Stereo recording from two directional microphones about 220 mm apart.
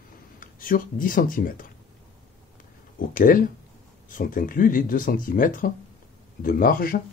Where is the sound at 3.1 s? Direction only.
40° left (ahead or behind).